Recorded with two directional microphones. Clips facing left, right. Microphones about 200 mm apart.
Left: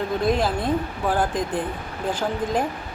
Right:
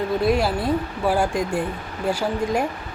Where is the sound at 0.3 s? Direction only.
10° right (ahead or behind).